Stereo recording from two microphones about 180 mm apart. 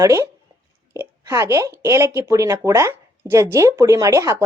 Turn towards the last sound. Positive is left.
turn(degrees=-15)  # may be behind; listen again after turning